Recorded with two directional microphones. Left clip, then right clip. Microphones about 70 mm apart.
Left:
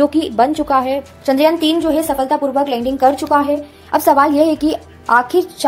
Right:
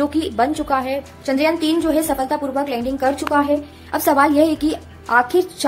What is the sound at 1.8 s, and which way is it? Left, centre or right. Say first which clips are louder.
A woman's voice: left 3 dB; left.